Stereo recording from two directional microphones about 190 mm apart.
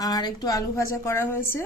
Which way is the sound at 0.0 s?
20° left (ahead or behind).